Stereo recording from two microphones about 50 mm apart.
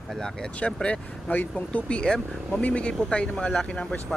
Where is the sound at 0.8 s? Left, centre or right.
Left.